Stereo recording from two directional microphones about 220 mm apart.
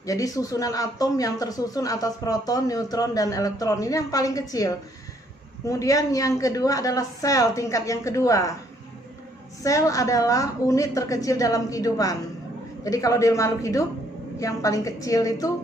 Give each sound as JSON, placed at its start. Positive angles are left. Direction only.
{"t": 0.0, "sound": "speech", "side_deg": 15}
{"t": 9.6, "sound": "speech", "side_deg": 15}